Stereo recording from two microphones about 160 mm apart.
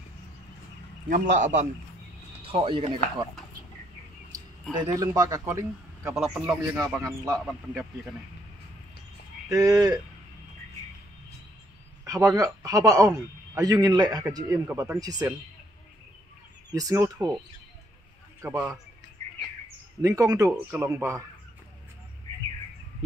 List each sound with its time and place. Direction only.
1.0 s a man's voice: 55° right (ahead or behind)
2.4 s speech: 35° right (ahead or behind)
4.7 s a man's voice: 25° right (ahead or behind)
6.1 s speech: 5° right (ahead or behind)
7.0 s a man's voice: 20° right (ahead or behind)
7.3 s speech: centre (ahead or behind)
9.5 s a man's voice: 20° right (ahead or behind)
12.0 s a man's voice: 20° right (ahead or behind)
16.7 s a man's voice: 20° right (ahead or behind)
18.4 s speech: 15° right (ahead or behind)
20.0 s a man's voice: 20° right (ahead or behind)